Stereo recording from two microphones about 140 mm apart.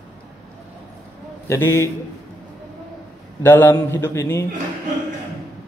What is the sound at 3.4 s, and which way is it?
A man's voice, 15° left (ahead or behind).